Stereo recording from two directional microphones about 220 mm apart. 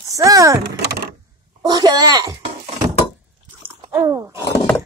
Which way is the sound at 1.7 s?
15° right (ahead or behind).